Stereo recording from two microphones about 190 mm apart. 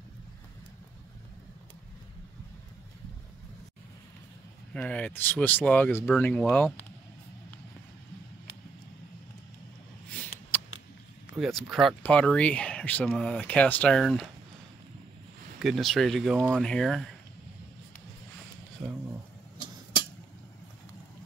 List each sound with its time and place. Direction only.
4.7 s speech: 10° left (ahead or behind)
10.5 s a sound: 10° left (ahead or behind)
11.3 s speech: centre (ahead or behind)
15.6 s speech: centre (ahead or behind)